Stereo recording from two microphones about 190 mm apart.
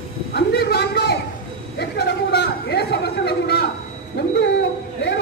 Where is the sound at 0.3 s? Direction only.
55° left (ahead or behind).